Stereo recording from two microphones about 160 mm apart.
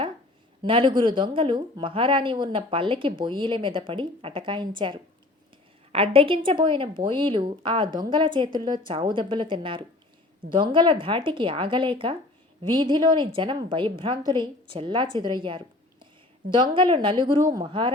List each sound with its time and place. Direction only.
0.6 s speech: 30° right (ahead or behind)